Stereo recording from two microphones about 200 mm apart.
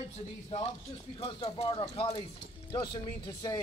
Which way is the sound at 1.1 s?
30° left (ahead or behind).